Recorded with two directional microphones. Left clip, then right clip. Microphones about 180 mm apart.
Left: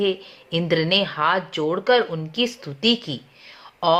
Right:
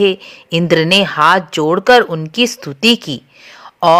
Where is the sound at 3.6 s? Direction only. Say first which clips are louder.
Right 9 dB; 40° right (ahead or behind).